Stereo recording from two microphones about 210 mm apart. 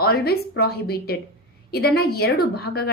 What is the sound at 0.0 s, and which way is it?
A woman's voice, 50° left (ahead or behind).